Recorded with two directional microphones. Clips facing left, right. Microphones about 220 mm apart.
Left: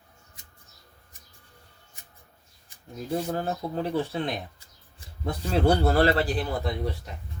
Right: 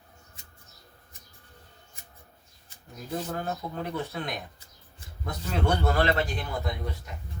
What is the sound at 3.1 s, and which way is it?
Speech, 30° left (ahead or behind).